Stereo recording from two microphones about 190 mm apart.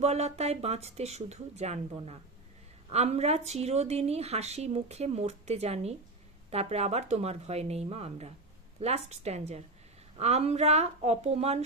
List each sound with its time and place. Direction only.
0.0 s speech: 35° right (ahead or behind)